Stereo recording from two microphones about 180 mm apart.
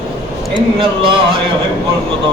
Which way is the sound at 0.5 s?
30° right (ahead or behind).